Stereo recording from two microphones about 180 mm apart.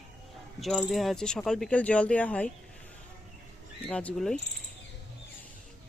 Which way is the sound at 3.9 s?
5° left (ahead or behind).